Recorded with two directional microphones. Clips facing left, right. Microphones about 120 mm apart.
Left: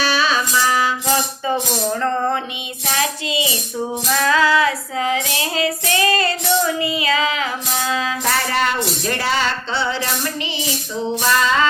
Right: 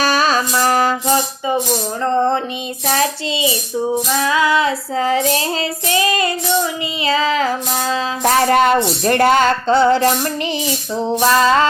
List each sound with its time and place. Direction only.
0.0 s music: 45° right (ahead or behind)
2.0 s child singing: 20° right (ahead or behind)
4.9 s child singing: 35° right (ahead or behind); by 6.3 s 20° right (ahead or behind)
6.8 s child singing: 30° right (ahead or behind)
8.2 s music: 45° right (ahead or behind)
11.3 s child singing: 40° right (ahead or behind)